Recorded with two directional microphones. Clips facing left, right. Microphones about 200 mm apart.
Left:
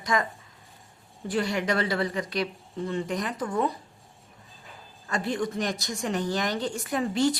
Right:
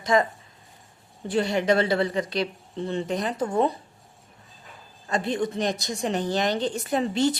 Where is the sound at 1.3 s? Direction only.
25° right (ahead or behind).